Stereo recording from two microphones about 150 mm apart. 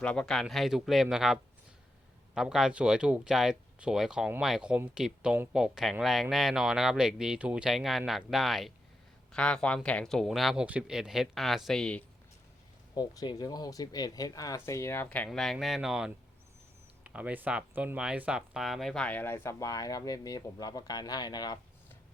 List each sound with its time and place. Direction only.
0.0 s speech: 5° left (ahead or behind)
12.9 s speech: 30° left (ahead or behind); by 15.3 s 15° left (ahead or behind)
15.3 s speech: centre (ahead or behind); by 21.6 s 25° left (ahead or behind)